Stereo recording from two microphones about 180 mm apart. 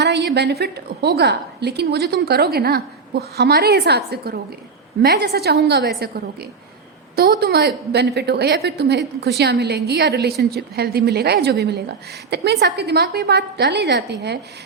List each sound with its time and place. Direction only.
0.6 s a woman's voice: 65° right (ahead or behind)